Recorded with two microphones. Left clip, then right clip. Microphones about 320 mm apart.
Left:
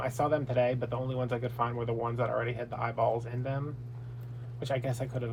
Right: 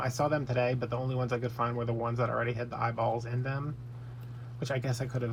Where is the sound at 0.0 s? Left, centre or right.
Right.